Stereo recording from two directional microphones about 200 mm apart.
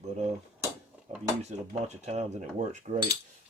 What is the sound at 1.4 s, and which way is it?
Speech, 35° right (ahead or behind).